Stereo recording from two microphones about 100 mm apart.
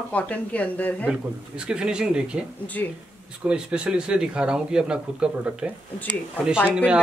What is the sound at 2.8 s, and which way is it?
Speech, 20° left (ahead or behind).